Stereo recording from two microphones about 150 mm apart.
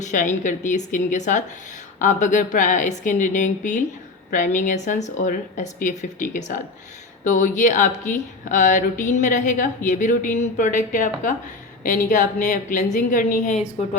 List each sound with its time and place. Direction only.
0.0 s a woman's voice: 55° left (ahead or behind)
7.3 s a woman's voice: 60° left (ahead or behind)